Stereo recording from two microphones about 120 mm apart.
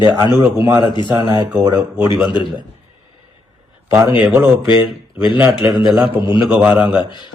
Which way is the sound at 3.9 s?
25° right (ahead or behind).